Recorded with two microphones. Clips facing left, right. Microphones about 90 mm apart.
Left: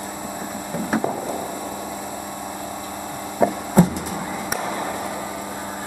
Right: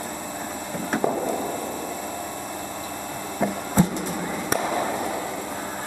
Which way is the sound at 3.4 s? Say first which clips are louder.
Left 6 dB; 15° left (ahead or behind).